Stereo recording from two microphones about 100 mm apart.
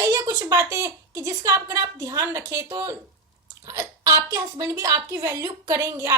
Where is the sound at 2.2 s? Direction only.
25° right (ahead or behind).